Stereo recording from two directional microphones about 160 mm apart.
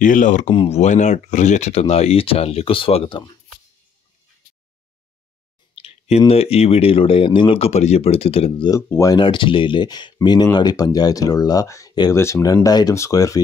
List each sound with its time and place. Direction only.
0.0 s speech: 55° left (ahead or behind)
0.5 s speech: 30° left (ahead or behind)
0.7 s speech: 50° left (ahead or behind)
5.8 s speech: 40° left (ahead or behind); by 9.2 s 20° left (ahead or behind)
9.2 s speech: 30° left (ahead or behind)